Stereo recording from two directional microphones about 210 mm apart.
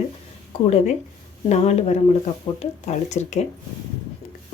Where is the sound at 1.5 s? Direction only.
30° left (ahead or behind).